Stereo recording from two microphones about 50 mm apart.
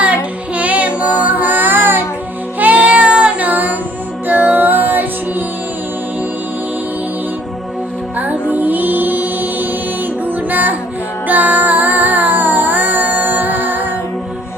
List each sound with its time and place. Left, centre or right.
0.0 s music: right
2.6 s child singing: right
4.3 s music: right
8.2 s music: right